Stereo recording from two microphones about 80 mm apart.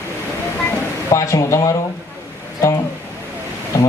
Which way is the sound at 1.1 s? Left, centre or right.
Left.